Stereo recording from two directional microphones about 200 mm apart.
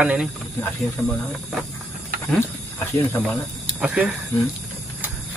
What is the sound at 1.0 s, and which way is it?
Speech, 5° left (ahead or behind).